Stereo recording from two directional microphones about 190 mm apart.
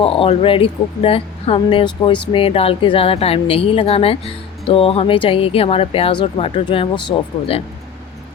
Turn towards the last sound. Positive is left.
turn(degrees=25)  # may be behind; listen again after turning